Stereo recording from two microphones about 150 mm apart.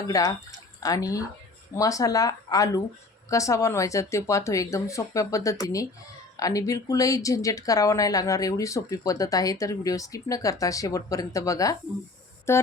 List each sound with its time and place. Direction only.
0.1 s speech: 20° left (ahead or behind)